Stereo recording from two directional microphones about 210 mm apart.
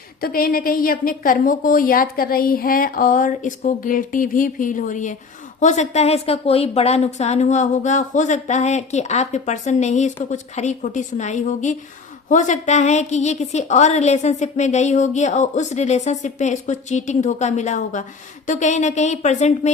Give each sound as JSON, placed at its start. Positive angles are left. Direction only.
{"t": 0.2, "sound": "a woman's voice", "side_deg": 45}